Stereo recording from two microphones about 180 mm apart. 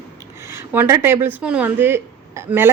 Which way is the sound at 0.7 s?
10° right (ahead or behind).